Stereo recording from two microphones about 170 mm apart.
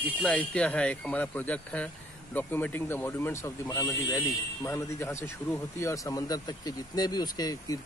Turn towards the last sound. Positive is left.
turn(degrees=20)  # may be behind; listen again after turning